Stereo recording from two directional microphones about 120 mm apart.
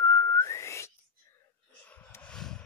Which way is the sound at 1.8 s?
15° left (ahead or behind).